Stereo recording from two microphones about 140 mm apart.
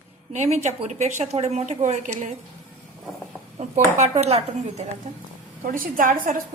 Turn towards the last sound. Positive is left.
turn(degrees=-80)